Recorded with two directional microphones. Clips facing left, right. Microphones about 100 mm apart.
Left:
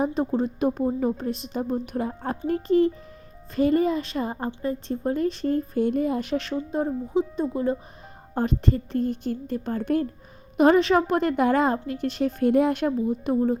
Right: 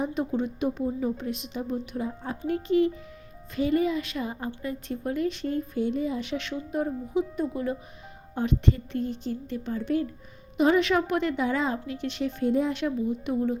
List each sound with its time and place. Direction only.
0.1 s a woman's voice: 35° left (ahead or behind)
8.4 s a woman's voice: 40° left (ahead or behind)
10.8 s a woman's voice: 35° left (ahead or behind)
12.4 s speech: 60° left (ahead or behind)
13.1 s a woman's voice: 40° left (ahead or behind)